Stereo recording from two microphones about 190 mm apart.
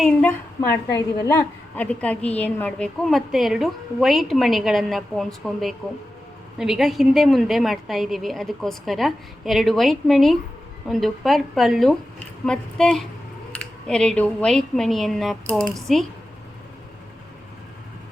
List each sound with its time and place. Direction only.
0.0 s a woman's voice: 5° left (ahead or behind)
0.9 s a woman's voice: 20° left (ahead or behind)
1.7 s a woman's voice: 5° left (ahead or behind)